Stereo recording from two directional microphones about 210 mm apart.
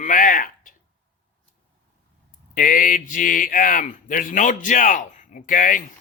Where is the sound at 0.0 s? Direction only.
40° left (ahead or behind).